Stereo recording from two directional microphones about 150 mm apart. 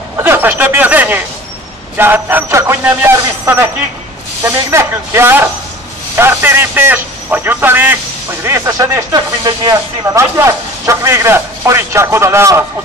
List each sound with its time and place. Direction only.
0.2 s a man's voice: 15° right (ahead or behind)
4.6 s a man's voice: 20° right (ahead or behind)